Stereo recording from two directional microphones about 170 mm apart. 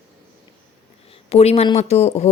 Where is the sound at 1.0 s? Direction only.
35° left (ahead or behind).